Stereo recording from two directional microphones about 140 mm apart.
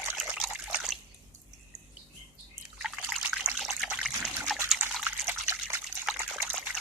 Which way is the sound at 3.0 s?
10° right (ahead or behind).